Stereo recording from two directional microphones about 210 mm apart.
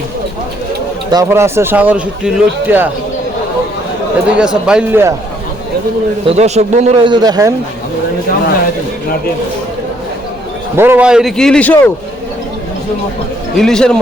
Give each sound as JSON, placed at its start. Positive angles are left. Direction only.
{"t": 1.1, "sound": "speech", "side_deg": -15}
{"t": 4.4, "sound": "speech", "side_deg": -5}
{"t": 6.2, "sound": "speech", "side_deg": -30}
{"t": 10.8, "sound": "speech", "side_deg": -10}
{"t": 13.6, "sound": "speech", "side_deg": 5}